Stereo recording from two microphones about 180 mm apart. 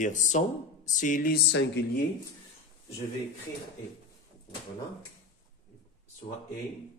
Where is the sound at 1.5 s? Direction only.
75° left (ahead or behind).